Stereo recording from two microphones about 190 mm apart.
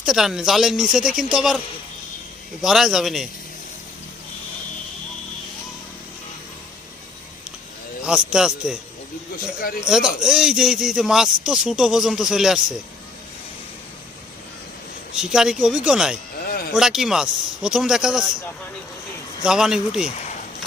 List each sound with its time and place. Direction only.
0.0 s a man's voice: centre (ahead or behind)
8.0 s a man's voice: 5° right (ahead or behind)
9.8 s a man's voice: 5° right (ahead or behind)
15.1 s a man's voice: 5° right (ahead or behind)
19.4 s a man's voice: 5° right (ahead or behind)
20.1 s a sound: 40° left (ahead or behind)